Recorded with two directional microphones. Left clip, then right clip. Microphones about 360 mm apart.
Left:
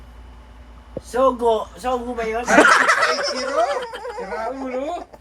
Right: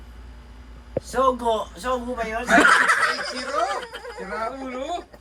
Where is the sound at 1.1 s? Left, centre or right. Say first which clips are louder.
Left 4 dB; centre.